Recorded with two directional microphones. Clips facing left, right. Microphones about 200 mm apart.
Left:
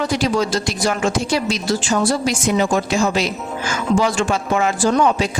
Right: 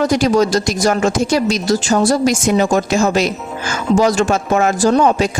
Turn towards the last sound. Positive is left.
turn(degrees=-40)  # may be behind; listen again after turning